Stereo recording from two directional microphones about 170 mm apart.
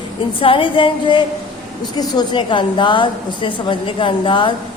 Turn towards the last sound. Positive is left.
turn(degrees=30)  # may be behind; listen again after turning